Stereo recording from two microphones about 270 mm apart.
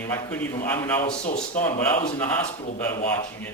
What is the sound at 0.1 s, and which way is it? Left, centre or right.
Speech, centre.